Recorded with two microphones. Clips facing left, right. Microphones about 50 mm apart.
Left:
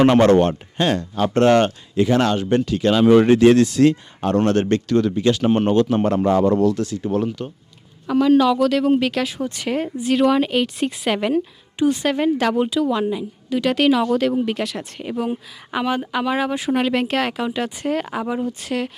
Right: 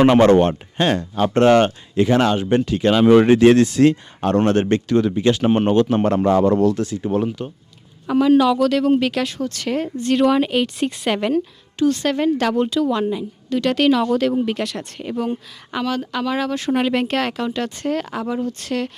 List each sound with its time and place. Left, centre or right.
0.0 s speech: right
2.2 s speech: right
5.9 s a man's voice: right
6.8 s speech: right; by 9.4 s centre
9.4 s a woman's voice: centre
15.8 s a woman's voice: centre